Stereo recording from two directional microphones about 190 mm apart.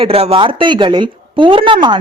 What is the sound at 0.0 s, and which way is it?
A woman's voice, 30° right (ahead or behind).